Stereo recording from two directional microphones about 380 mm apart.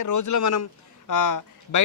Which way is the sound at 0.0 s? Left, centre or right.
Left.